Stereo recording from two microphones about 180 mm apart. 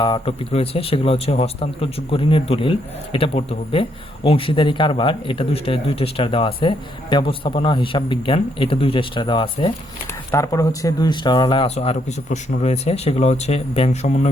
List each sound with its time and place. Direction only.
0.0 s speech: 30° left (ahead or behind)
10.3 s speech: 20° left (ahead or behind); by 14.3 s 40° left (ahead or behind)